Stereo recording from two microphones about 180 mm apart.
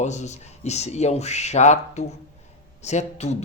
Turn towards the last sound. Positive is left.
turn(degrees=40)  # may be behind; listen again after turning